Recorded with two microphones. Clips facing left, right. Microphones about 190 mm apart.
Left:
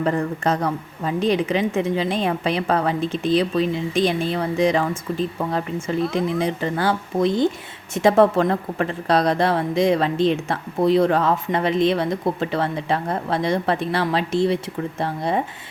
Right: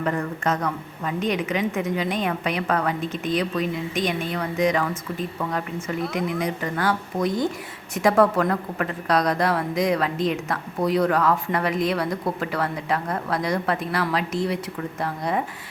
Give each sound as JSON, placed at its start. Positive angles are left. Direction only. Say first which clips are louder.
{"t": 0.0, "sound": "a woman's voice", "louder": "left 4 dB", "side_deg": 30}